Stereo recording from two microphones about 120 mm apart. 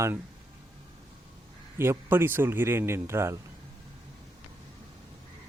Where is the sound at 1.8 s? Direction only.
20° right (ahead or behind).